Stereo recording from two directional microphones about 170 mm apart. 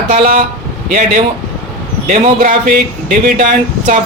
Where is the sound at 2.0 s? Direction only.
50° right (ahead or behind).